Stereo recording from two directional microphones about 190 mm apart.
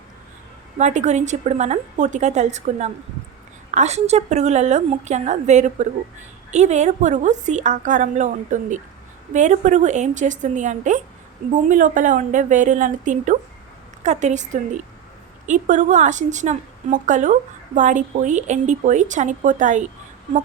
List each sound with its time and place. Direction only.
0.8 s a woman's voice: 40° right (ahead or behind)